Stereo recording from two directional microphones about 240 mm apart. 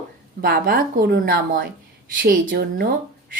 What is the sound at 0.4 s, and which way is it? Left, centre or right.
Speech, right.